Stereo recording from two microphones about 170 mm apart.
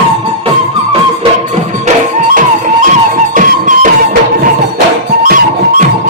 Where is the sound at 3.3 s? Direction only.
50° right (ahead or behind).